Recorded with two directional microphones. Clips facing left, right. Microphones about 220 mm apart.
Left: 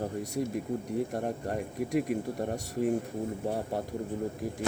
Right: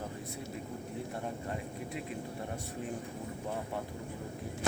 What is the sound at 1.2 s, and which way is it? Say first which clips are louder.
Speech: left 6 dB; 55° left (ahead or behind).